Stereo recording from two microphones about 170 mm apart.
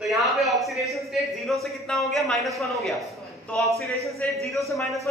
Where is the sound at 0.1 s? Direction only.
Centre (ahead or behind).